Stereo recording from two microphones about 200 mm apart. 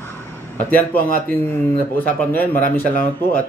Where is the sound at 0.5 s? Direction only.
10° left (ahead or behind).